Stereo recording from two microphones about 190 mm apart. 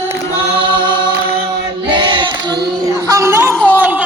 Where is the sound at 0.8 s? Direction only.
25° right (ahead or behind).